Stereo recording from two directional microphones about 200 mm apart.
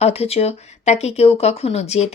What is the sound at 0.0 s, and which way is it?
Speech, 30° left (ahead or behind).